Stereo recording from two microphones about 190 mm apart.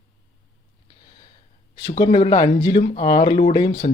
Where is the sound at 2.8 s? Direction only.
45° left (ahead or behind).